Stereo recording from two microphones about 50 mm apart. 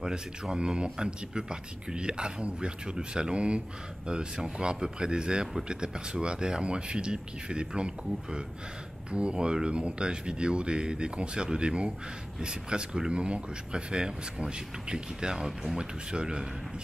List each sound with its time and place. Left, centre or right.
0.0 s speech: centre